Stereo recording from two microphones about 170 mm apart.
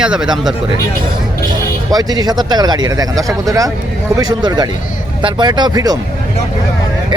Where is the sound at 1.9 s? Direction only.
25° right (ahead or behind).